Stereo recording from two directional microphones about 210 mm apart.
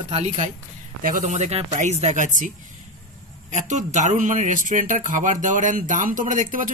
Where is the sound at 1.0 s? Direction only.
40° right (ahead or behind).